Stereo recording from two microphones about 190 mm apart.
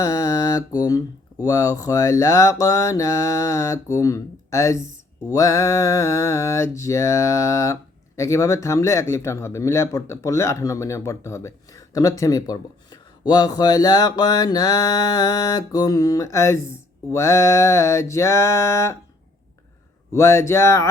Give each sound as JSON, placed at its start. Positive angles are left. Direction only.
{"t": 0.0, "sound": "mantra", "side_deg": 20}
{"t": 20.1, "sound": "mantra", "side_deg": 15}